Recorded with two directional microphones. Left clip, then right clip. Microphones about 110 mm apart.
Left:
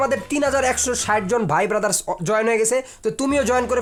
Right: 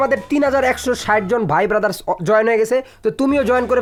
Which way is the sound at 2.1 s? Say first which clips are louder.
Right 6 dB; 35° right (ahead or behind).